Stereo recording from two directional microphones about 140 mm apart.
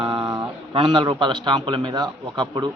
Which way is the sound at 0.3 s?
30° right (ahead or behind).